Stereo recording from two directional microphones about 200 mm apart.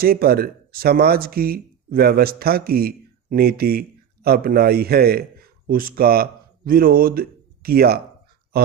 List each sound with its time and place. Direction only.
0.0 s a man's voice: 50° right (ahead or behind)